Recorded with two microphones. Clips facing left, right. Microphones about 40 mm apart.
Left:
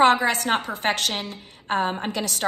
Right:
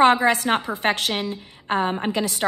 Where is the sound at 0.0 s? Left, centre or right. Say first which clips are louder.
Right 2 dB; right.